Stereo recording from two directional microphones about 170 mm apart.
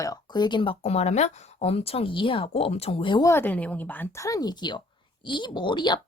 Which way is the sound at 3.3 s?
10° left (ahead or behind).